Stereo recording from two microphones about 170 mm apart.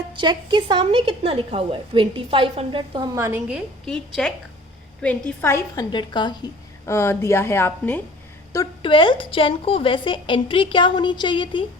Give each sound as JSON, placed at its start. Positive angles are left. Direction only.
{"t": 0.1, "sound": "a woman's voice", "side_deg": -25}
{"t": 3.2, "sound": "a woman's voice", "side_deg": -15}
{"t": 3.8, "sound": "a woman's voice", "side_deg": 5}
{"t": 5.4, "sound": "a woman's voice", "side_deg": 15}
{"t": 8.8, "sound": "a woman's voice", "side_deg": 30}